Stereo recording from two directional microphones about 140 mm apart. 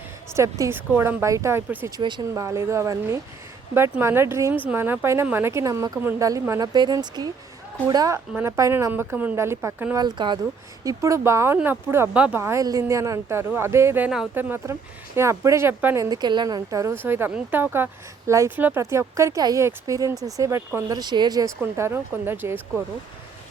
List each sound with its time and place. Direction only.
0.3 s a woman's voice: 20° right (ahead or behind)
2.0 s speech: 35° right (ahead or behind)
2.3 s a woman's voice: 20° right (ahead or behind)
10.0 s a woman's voice: 30° right (ahead or behind); by 16.0 s 15° right (ahead or behind)
16.0 s a woman's voice: 30° right (ahead or behind)
21.6 s a woman's voice: 15° right (ahead or behind)